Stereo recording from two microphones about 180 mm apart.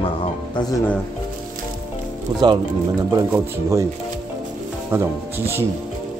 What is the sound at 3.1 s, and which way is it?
Speech, 15° right (ahead or behind).